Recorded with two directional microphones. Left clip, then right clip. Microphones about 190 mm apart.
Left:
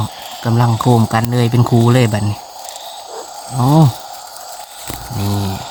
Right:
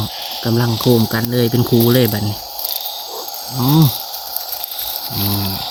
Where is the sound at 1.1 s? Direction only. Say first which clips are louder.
Left 1 dB; 55° left (ahead or behind).